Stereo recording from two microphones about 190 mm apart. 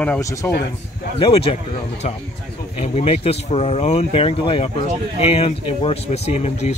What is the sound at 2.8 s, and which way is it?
Speech, 35° left (ahead or behind).